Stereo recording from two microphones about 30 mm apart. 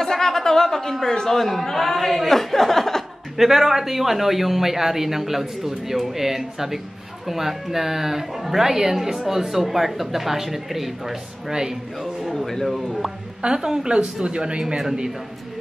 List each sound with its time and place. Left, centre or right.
0.0 s a sound: centre
1.0 s a man's voice: centre
3.3 s speech: centre
12.4 s a man's voice: centre
13.5 s a woman's voice: right